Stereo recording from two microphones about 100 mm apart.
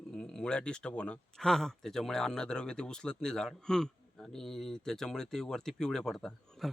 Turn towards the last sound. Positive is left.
turn(degrees=5)  # may be behind; listen again after turning